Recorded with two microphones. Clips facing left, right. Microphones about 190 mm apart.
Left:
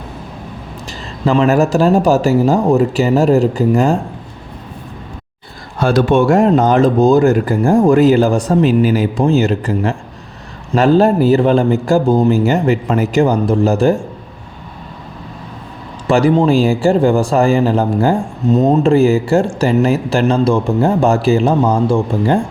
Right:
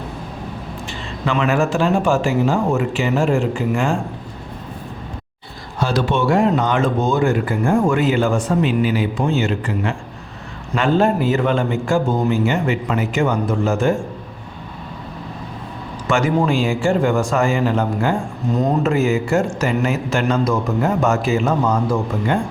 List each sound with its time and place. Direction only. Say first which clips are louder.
1.2 s speech: left 6 dB; 35° left (ahead or behind)
5.8 s speech: left 7 dB; 50° left (ahead or behind); by 13.9 s 35° left (ahead or behind)
16.0 s speech: left 6 dB; 35° left (ahead or behind)
18.5 s speech: left 7 dB; 25° left (ahead or behind)